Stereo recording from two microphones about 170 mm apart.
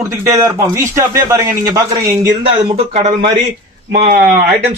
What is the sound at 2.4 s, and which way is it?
Speech, 35° right (ahead or behind).